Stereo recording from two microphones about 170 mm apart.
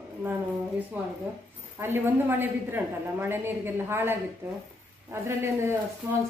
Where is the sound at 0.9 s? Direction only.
10° right (ahead or behind).